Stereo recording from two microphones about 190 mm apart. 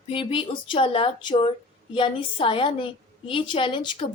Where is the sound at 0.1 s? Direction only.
30° left (ahead or behind).